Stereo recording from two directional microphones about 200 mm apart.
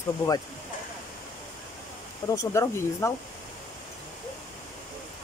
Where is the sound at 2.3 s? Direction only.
15° left (ahead or behind).